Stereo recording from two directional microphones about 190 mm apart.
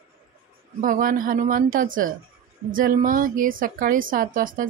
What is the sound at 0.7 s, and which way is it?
A woman's voice, 45° right (ahead or behind).